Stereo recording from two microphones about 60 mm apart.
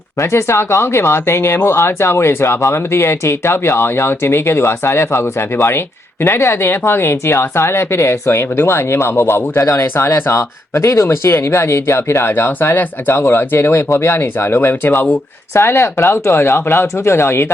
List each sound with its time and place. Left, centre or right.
0.2 s speech: left